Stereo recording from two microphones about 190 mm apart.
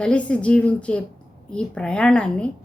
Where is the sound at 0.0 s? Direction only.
5° left (ahead or behind).